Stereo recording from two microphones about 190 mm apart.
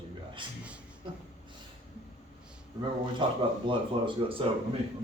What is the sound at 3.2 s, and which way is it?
Speech, 25° right (ahead or behind).